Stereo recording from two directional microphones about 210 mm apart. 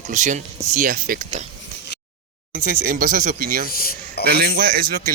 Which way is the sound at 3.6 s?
45° left (ahead or behind).